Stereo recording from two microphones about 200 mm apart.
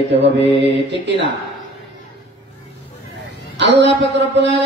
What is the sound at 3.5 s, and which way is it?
Mantra, 60° right (ahead or behind).